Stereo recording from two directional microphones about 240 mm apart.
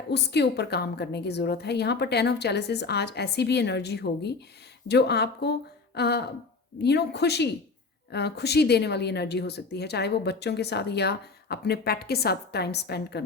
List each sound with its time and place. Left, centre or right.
0.1 s speech: left